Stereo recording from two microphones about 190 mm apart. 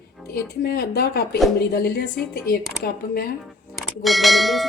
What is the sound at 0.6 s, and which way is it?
A woman's voice, 55° left (ahead or behind).